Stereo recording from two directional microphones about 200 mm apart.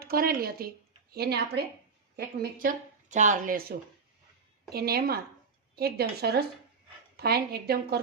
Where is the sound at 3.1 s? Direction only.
40° right (ahead or behind).